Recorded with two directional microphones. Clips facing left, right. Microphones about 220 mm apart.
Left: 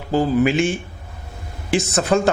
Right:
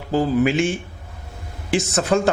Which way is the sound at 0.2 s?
10° left (ahead or behind).